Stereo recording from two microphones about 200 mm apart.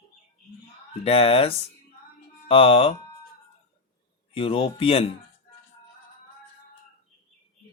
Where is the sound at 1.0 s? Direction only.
30° left (ahead or behind).